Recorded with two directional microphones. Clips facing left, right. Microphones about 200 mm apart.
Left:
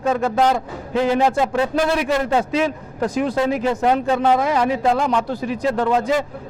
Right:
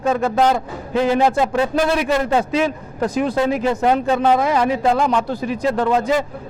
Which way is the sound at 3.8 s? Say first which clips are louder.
Right 1 dB; 25° right (ahead or behind).